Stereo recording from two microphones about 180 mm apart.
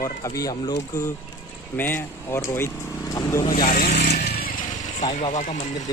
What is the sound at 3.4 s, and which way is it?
Speech, 50° left (ahead or behind).